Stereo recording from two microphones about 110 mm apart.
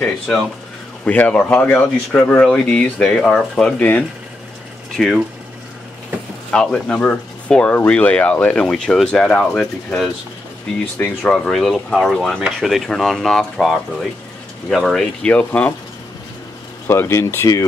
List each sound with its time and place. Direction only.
1.0 s speech: 10° left (ahead or behind)
4.9 s speech: centre (ahead or behind)
6.5 s speech: 10° left (ahead or behind)
11.2 s speech: 5° left (ahead or behind)
16.8 s speech: 20° left (ahead or behind)